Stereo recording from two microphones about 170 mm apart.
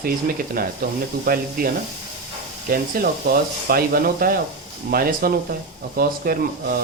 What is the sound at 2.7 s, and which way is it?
Speech, 60° right (ahead or behind).